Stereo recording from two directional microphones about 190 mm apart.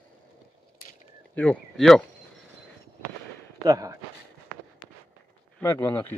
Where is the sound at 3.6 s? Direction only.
20° right (ahead or behind).